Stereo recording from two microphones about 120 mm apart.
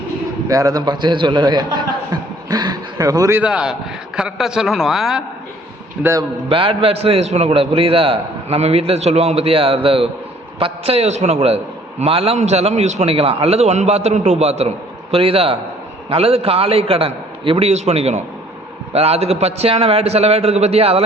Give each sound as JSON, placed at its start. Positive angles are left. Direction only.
{"t": 0.4, "sound": "a man's voice", "side_deg": -30}
{"t": 3.4, "sound": "a man's voice", "side_deg": -5}
{"t": 6.5, "sound": "a man's voice", "side_deg": -50}
{"t": 15.1, "sound": "a man's voice", "side_deg": -50}
{"t": 17.7, "sound": "a man's voice", "side_deg": -65}